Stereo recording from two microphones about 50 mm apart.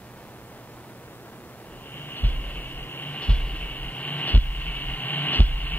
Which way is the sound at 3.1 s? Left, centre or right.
Left.